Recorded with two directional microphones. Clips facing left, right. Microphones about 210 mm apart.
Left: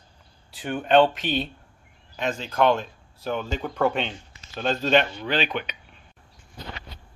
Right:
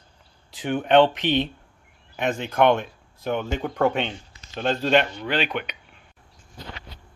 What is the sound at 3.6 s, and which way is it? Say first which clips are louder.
Speech: right 1 dB; centre (ahead or behind).